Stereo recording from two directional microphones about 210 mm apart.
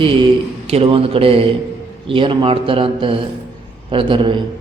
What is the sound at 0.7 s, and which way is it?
A man's voice, 30° right (ahead or behind).